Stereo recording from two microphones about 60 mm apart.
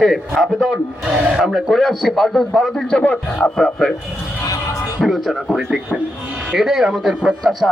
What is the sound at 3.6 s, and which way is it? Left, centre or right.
Speech, centre.